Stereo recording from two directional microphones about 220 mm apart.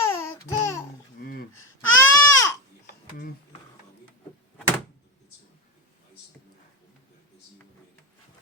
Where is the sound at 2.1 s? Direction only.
15° left (ahead or behind).